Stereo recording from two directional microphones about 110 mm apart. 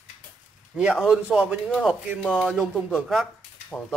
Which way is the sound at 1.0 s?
10° right (ahead or behind).